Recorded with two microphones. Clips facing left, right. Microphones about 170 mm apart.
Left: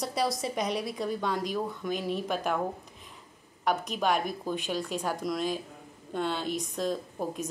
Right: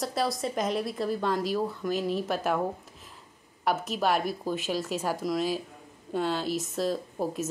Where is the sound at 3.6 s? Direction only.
5° right (ahead or behind).